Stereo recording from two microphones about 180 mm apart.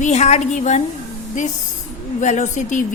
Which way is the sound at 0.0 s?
40° left (ahead or behind).